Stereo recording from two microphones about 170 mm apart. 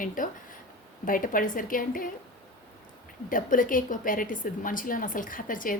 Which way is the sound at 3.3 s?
55° left (ahead or behind).